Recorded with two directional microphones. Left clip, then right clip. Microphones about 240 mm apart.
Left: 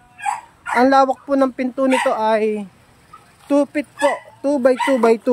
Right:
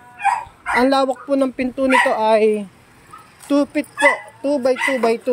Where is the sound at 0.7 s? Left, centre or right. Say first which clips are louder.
Left 2 dB; centre.